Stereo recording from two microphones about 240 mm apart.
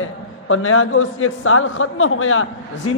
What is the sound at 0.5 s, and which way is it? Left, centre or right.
A man's voice, left.